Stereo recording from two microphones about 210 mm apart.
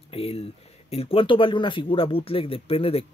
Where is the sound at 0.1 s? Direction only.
30° left (ahead or behind).